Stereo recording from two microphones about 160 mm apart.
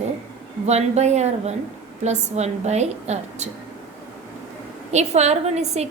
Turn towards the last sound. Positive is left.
turn(degrees=-45)  # may be behind; listen again after turning